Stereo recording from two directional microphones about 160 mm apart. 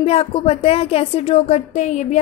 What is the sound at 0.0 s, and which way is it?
Speech, 40° left (ahead or behind).